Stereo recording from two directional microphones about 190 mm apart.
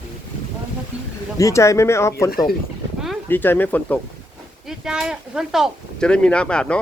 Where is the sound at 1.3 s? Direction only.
15° left (ahead or behind).